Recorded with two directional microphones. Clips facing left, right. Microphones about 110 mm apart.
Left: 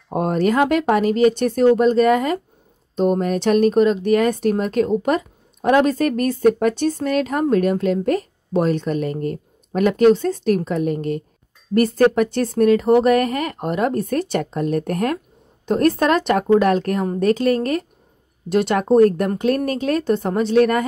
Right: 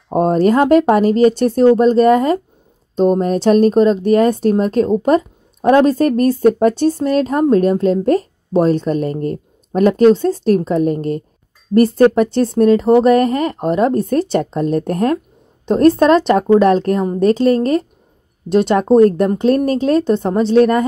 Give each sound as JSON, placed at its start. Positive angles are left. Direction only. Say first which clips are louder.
{"t": 0.1, "sound": "speech", "louder": "right 6 dB", "side_deg": -35}